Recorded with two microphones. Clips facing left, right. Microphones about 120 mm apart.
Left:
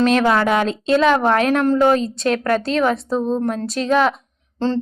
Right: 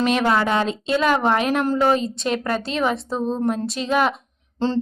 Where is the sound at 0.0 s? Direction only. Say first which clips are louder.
Left 3 dB; 5° right (ahead or behind).